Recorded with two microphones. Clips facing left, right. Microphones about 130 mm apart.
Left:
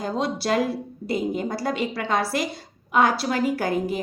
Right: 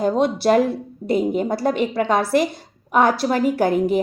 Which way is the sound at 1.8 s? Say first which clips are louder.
Right 5 dB; 50° right (ahead or behind).